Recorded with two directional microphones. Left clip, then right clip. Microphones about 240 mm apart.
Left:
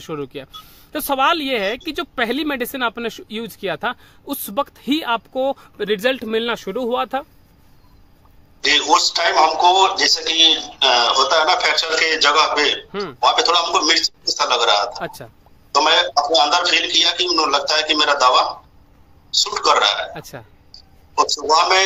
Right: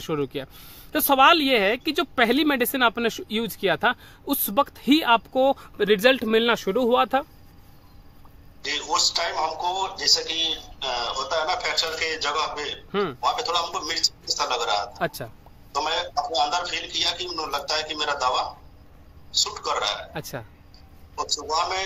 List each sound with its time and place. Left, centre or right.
0.0 s speech: centre
8.6 s speech: left
12.9 s speech: centre
13.2 s speech: left
15.0 s speech: centre
15.7 s speech: left
20.2 s speech: centre
20.7 s a sound: left